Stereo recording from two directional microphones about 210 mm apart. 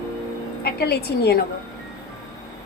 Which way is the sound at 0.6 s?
50° left (ahead or behind).